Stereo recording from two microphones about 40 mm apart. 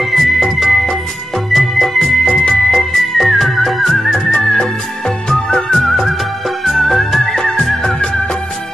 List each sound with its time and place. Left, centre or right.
0.0 s music: centre
2.2 s music: left
2.7 s music: centre
4.5 s music of bollywood: centre
6.6 s music: centre